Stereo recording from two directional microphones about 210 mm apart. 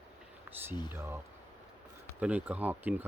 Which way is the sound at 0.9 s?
10° right (ahead or behind).